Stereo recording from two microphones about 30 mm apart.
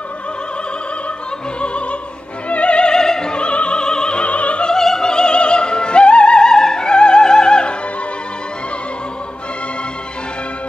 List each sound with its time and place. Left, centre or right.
1.6 s opera: left
2.9 s opera: left
3.4 s opera: left
4.6 s opera: centre; by 6.4 s left
6.4 s music: left